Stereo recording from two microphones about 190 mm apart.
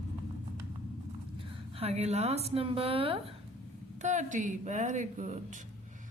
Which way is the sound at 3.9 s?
40° right (ahead or behind).